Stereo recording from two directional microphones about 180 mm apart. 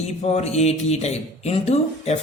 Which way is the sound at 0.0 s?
35° left (ahead or behind).